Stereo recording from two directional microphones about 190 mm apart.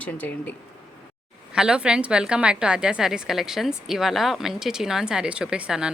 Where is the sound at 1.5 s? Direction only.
5° right (ahead or behind).